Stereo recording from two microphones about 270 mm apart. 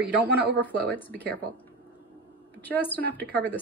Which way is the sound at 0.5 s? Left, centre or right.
Centre.